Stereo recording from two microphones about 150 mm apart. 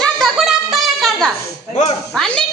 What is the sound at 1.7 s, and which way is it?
Speech, 45° left (ahead or behind).